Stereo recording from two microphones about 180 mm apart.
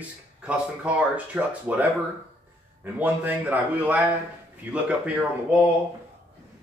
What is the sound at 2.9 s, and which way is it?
Speech, 10° right (ahead or behind).